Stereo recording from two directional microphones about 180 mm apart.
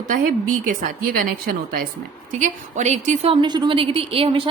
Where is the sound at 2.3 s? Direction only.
40° right (ahead or behind).